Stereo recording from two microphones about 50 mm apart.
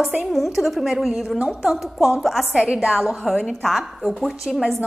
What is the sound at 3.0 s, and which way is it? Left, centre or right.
A woman's voice, centre.